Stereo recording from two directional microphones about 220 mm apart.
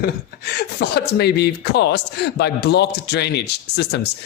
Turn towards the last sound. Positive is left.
turn(degrees=50)  # may be behind; listen again after turning